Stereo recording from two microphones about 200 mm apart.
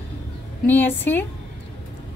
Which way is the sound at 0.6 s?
10° left (ahead or behind).